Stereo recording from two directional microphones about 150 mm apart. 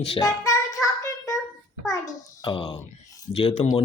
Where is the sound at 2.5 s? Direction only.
40° left (ahead or behind).